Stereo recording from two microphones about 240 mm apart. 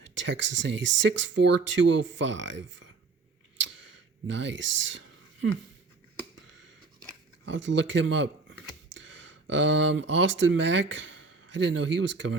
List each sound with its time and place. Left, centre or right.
0.0 s speech: right
4.3 s speech: right
7.4 s speech: right
9.0 s a sound: right
9.5 s speech: right